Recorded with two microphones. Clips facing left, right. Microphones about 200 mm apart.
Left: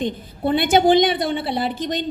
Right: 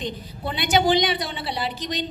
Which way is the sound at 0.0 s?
50° left (ahead or behind).